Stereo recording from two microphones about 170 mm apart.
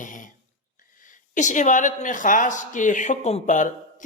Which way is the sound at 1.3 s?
45° left (ahead or behind).